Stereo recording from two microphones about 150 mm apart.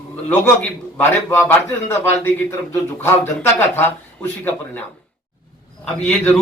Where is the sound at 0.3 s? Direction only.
10° left (ahead or behind).